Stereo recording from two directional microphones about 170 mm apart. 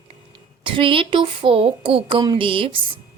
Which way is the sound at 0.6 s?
30° right (ahead or behind).